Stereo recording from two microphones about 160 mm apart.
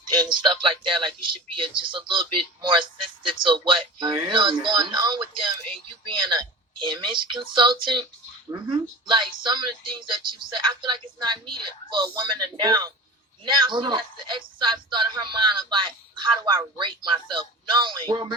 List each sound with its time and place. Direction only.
0.0 s speech: 25° right (ahead or behind)